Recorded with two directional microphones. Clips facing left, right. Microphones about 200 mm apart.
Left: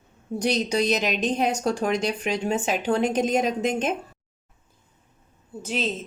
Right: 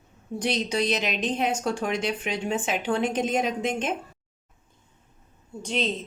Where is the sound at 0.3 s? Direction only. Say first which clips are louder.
Left 3 dB; 40° left (ahead or behind).